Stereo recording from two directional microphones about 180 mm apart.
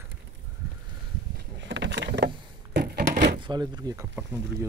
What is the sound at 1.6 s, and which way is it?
Vehicle, 80° right.